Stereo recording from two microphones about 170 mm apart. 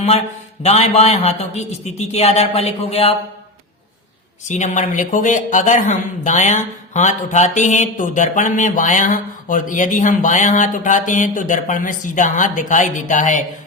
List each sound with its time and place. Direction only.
0.6 s a man's voice: 40° left (ahead or behind)
4.4 s speech: 45° left (ahead or behind)